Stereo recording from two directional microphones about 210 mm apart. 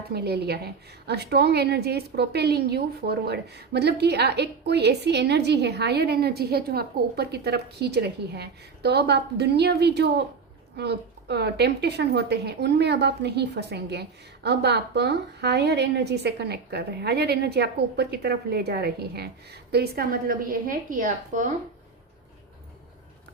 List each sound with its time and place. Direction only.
0.1 s a woman's voice: 50° right (ahead or behind)